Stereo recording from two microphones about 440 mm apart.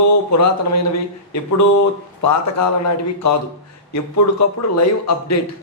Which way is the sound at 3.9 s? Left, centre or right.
Left.